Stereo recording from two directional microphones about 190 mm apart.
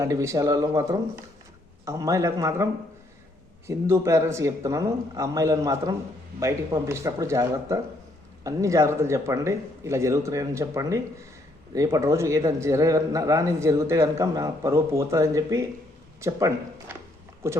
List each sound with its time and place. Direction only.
0.0 s speech: 15° right (ahead or behind)
3.7 s speech: 15° right (ahead or behind)
16.9 s a sound: 15° right (ahead or behind)